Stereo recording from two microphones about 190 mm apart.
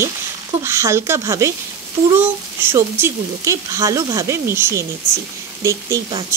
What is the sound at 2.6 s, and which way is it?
Speech, 15° right (ahead or behind).